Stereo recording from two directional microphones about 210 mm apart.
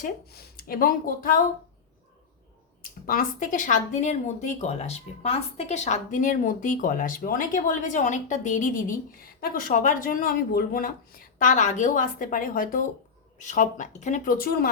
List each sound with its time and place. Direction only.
0.0 s speech: 45° left (ahead or behind)
3.1 s speech: 40° left (ahead or behind)